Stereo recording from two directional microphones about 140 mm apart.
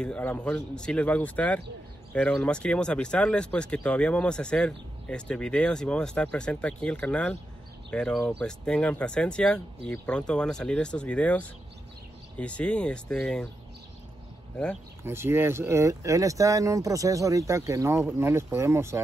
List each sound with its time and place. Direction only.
0.0 s speech: 10° left (ahead or behind)
15.0 s speech: 15° right (ahead or behind)